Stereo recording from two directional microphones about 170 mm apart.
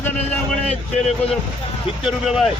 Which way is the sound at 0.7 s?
40° left (ahead or behind).